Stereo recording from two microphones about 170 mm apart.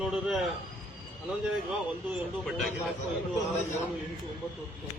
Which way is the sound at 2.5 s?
Centre (ahead or behind).